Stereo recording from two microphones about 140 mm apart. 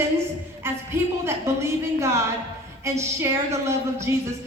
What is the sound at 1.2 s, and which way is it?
A woman's voice, 20° right (ahead or behind).